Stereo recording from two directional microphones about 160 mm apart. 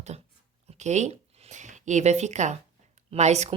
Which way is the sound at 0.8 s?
45° right (ahead or behind).